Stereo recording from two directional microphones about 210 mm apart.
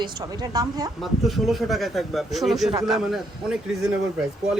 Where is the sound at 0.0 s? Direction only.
20° right (ahead or behind).